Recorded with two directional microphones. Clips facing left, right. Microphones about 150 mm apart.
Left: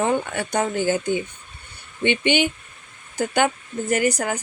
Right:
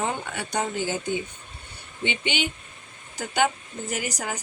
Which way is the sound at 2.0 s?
60° left (ahead or behind).